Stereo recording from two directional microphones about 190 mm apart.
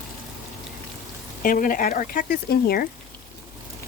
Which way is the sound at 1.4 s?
45° left (ahead or behind).